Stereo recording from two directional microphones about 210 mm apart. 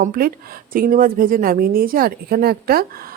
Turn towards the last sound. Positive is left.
turn(degrees=-45)  # may be behind; listen again after turning